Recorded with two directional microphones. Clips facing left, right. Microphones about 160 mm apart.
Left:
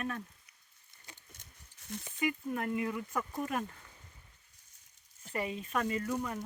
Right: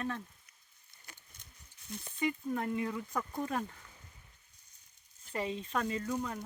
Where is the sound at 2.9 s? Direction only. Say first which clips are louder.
Left 1 dB; 5° left (ahead or behind).